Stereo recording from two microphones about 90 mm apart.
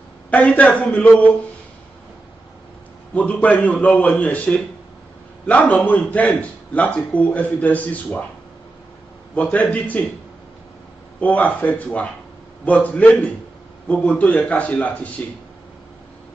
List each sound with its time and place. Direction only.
0.3 s speech: 15° left (ahead or behind)
3.2 s speech: 15° left (ahead or behind)
9.3 s speech: 15° left (ahead or behind)
11.1 s speech: 15° left (ahead or behind)